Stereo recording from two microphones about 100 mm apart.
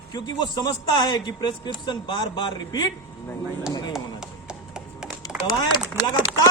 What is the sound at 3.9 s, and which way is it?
Chop, 5° right (ahead or behind).